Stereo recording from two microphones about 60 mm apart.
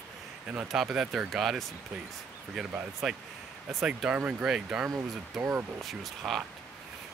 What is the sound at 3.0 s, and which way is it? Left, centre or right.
Speech, centre.